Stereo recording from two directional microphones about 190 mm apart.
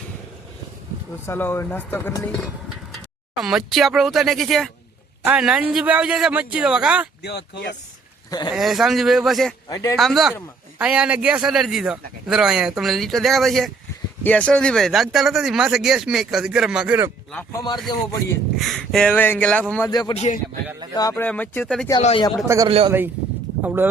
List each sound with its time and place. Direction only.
1.3 s speech: 10° left (ahead or behind)
2.9 s a man's voice: centre (ahead or behind)
7.2 s speech: 60° left (ahead or behind)
8.5 s a man's voice: centre (ahead or behind)
9.6 s a man's voice: 20° left (ahead or behind)
10.0 s a man's voice: centre (ahead or behind)
17.5 s speech: 20° left (ahead or behind)
18.5 s a man's voice: centre (ahead or behind)
19.9 s speech: 20° left (ahead or behind)
20.1 s a man's voice: 40° left (ahead or behind)
20.9 s speech: 15° left (ahead or behind)
22.0 s speech: 30° left (ahead or behind)
22.4 s a man's voice: 20° right (ahead or behind)